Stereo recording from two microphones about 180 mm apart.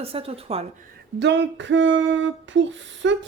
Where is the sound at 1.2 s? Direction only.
75° right (ahead or behind).